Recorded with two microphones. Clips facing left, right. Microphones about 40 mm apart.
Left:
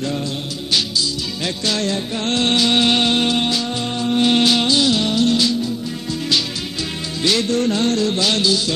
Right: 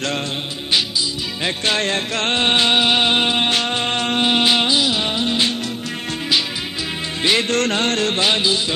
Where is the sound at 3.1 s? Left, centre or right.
Right.